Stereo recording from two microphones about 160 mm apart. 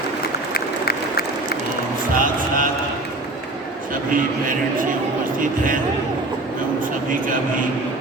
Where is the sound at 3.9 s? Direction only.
60° right (ahead or behind).